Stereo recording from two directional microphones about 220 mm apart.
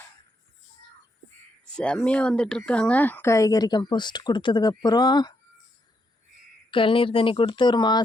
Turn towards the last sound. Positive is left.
turn(degrees=20)  # may be behind; listen again after turning